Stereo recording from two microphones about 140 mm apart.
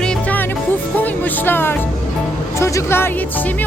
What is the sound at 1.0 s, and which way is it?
Speech, 15° left (ahead or behind).